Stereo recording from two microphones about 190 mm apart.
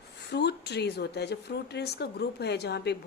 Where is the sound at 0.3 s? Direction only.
60° left (ahead or behind).